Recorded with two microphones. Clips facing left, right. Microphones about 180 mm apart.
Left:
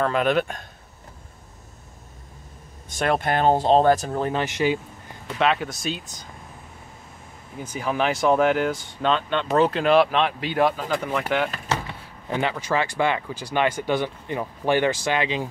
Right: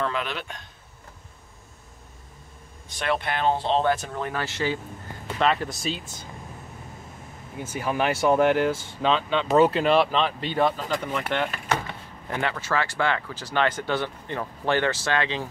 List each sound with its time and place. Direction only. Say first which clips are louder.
0.0 s speech: left 8 dB; 50° left (ahead or behind)
2.9 s speech: left 4 dB; 45° left (ahead or behind)
4.3 s speech: left 4 dB; 20° left (ahead or behind)
5.4 s speech: left 1 dB; centre (ahead or behind)
7.8 s speech: left 1 dB; 5° right (ahead or behind)
12.3 s speech: left 3 dB; 15° left (ahead or behind)